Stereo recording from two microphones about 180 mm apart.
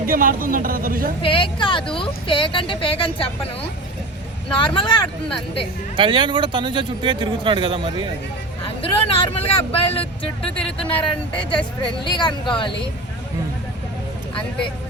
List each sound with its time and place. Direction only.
0.0 s speech: 50° right (ahead or behind)
1.2 s speech: 30° left (ahead or behind)
4.4 s speech: 25° left (ahead or behind)
6.0 s speech: 25° right (ahead or behind)
8.6 s speech: 30° left (ahead or behind)